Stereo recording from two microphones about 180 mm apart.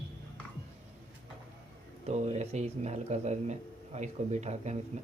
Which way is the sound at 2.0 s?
35° right (ahead or behind).